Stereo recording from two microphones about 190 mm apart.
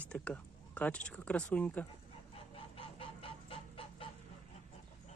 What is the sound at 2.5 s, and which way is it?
Chicken, 30° left (ahead or behind).